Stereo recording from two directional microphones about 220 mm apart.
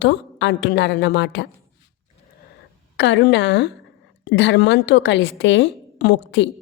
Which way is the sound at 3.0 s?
55° left (ahead or behind).